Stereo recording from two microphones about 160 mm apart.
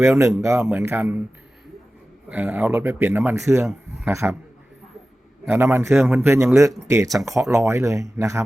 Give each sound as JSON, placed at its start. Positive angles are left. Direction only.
{"t": 0.0, "sound": "speech", "side_deg": -20}
{"t": 2.3, "sound": "speech", "side_deg": -10}
{"t": 5.5, "sound": "speech", "side_deg": -15}